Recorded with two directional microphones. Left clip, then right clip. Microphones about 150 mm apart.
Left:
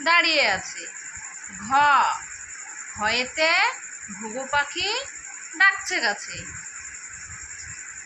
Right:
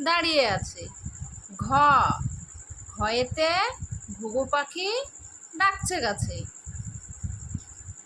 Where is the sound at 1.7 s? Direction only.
80° right.